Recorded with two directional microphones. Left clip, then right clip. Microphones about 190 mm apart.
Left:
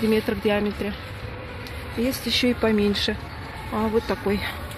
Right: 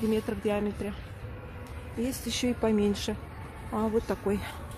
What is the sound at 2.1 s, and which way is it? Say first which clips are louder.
Speech: left 9 dB; 15° right (ahead or behind).